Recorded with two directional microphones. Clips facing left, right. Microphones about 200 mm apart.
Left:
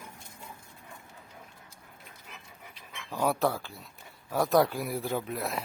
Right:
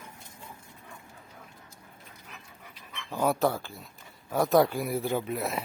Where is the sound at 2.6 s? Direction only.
10° left (ahead or behind).